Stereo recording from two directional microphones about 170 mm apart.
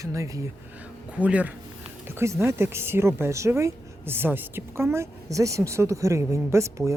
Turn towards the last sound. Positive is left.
turn(degrees=-15)  # may be behind; listen again after turning